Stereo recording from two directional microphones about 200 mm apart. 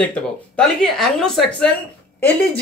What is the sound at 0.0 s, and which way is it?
Speech, 5° left (ahead or behind).